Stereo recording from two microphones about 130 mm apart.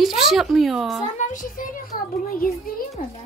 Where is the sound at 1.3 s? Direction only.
90° left.